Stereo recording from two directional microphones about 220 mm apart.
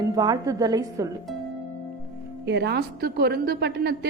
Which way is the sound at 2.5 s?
50° right (ahead or behind).